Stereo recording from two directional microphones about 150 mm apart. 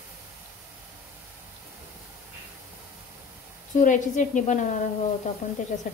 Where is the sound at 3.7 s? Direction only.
55° left (ahead or behind).